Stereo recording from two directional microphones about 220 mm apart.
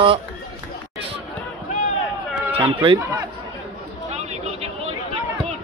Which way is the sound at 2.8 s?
20° right (ahead or behind).